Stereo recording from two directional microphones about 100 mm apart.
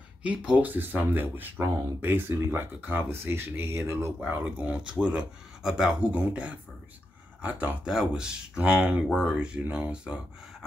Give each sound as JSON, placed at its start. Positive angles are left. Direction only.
{"t": 0.2, "sound": "speech", "side_deg": -10}
{"t": 4.2, "sound": "speech", "side_deg": -15}